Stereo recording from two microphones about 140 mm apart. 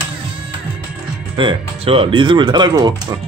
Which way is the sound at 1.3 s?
40° right (ahead or behind).